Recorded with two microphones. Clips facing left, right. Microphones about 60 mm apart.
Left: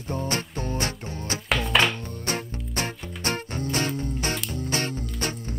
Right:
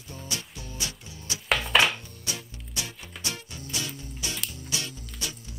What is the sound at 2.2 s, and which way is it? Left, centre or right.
Music, left.